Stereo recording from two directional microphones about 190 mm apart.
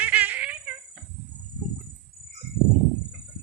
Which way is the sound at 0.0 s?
10° right (ahead or behind).